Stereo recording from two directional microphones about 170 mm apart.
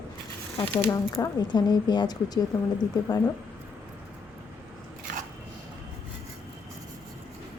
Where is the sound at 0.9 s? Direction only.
20° left (ahead or behind).